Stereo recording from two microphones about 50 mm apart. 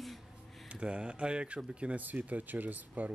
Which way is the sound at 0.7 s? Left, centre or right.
Right.